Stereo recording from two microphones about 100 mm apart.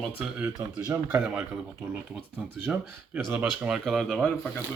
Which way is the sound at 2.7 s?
10° right (ahead or behind).